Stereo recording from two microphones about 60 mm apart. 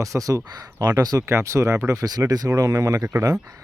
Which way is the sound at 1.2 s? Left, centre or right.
Right.